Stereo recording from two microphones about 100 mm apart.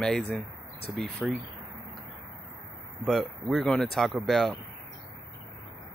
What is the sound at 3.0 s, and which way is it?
Speech, centre (ahead or behind).